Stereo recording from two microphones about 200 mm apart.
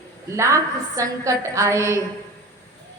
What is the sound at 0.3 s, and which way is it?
A woman's voice, 15° right (ahead or behind).